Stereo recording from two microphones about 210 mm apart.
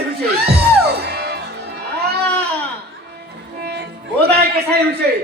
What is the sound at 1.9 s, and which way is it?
Cat, 50° right (ahead or behind).